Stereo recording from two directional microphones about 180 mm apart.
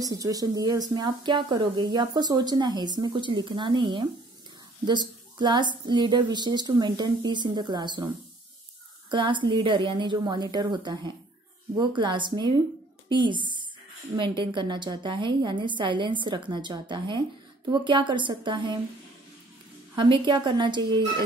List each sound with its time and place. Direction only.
0.0 s a woman's voice: 20° right (ahead or behind)
9.1 s a woman's voice: 25° right (ahead or behind)
20.0 s a woman's voice: 25° right (ahead or behind)